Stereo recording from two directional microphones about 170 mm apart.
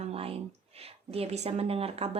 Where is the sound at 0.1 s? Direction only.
35° right (ahead or behind).